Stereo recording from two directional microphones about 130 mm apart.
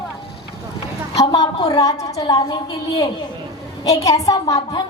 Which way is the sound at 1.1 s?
30° left (ahead or behind).